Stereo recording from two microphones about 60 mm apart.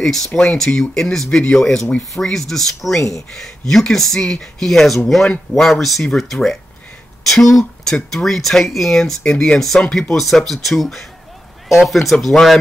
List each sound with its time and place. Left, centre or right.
0.0 s speech: centre
9.2 s speech: centre
10.1 s speech: centre